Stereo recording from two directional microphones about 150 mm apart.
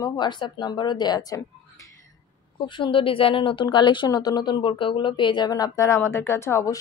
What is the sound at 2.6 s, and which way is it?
Speech, 35° left (ahead or behind).